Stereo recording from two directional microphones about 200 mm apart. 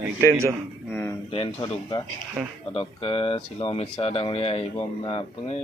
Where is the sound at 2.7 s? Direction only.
25° left (ahead or behind).